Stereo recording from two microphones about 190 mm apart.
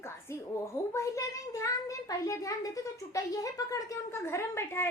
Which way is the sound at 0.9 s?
15° left (ahead or behind).